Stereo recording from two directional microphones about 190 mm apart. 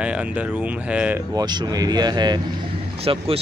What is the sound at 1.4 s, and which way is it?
Speech, 20° right (ahead or behind).